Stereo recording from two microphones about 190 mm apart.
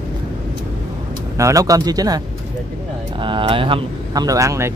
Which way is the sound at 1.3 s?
15° right (ahead or behind).